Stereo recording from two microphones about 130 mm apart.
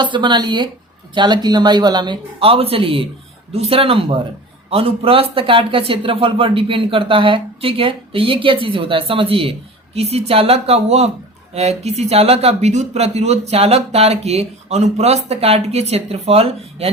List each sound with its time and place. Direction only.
0.0 s speech: 35° right (ahead or behind)